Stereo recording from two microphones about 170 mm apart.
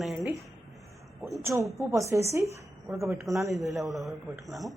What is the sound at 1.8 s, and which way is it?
A woman's voice, 15° right (ahead or behind).